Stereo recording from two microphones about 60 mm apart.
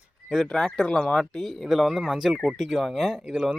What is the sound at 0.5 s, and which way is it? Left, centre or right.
Speech, centre.